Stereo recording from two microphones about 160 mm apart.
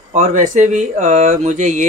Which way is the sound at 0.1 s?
50° right (ahead or behind).